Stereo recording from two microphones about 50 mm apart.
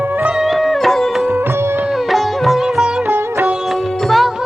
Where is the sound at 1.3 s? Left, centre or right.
Right.